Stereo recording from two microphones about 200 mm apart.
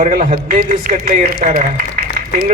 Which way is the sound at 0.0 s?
40° right (ahead or behind).